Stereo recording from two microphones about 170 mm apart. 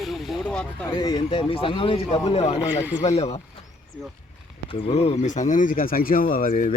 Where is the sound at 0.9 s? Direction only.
25° left (ahead or behind).